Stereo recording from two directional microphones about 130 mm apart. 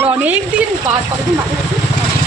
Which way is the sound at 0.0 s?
15° right (ahead or behind).